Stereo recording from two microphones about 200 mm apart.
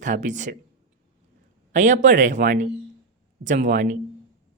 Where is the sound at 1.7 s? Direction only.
40° right (ahead or behind).